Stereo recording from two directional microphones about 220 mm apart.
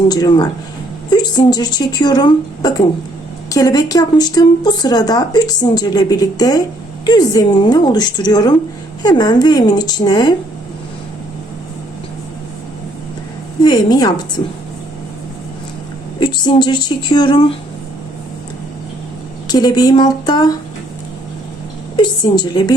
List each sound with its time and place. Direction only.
0.1 s a woman's voice: 20° left (ahead or behind)
13.6 s a woman's voice: 20° left (ahead or behind)
16.2 s a woman's voice: 20° left (ahead or behind)
19.5 s a woman's voice: 20° left (ahead or behind)
21.9 s a woman's voice: 20° left (ahead or behind)